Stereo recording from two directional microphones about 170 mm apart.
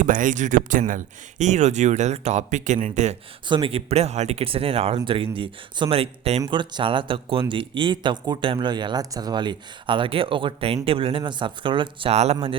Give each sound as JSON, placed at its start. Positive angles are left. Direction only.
{"t": 0.0, "sound": "speech", "side_deg": -50}
{"t": 3.5, "sound": "speech", "side_deg": -35}